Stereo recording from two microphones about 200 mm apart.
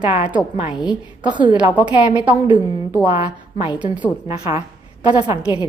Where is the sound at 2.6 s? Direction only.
20° left (ahead or behind).